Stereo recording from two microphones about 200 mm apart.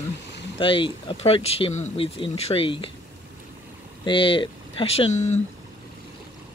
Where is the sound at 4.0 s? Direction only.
25° left (ahead or behind).